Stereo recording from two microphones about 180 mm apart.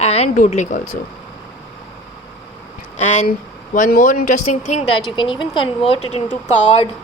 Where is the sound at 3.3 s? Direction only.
50° left (ahead or behind).